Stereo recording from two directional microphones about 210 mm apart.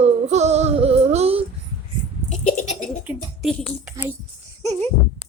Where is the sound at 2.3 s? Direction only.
35° left (ahead or behind).